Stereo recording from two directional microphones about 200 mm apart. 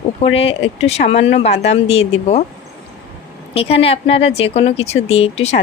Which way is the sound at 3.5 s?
30° left (ahead or behind).